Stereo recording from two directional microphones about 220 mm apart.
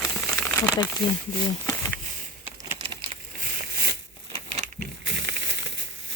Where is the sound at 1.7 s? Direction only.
10° left (ahead or behind).